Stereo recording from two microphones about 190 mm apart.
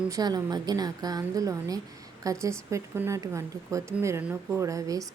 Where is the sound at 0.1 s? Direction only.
20° right (ahead or behind).